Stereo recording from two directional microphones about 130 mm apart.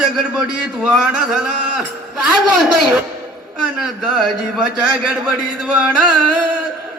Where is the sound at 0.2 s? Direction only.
5° right (ahead or behind).